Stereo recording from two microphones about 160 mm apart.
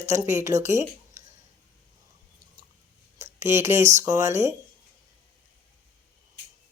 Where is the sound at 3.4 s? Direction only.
15° right (ahead or behind).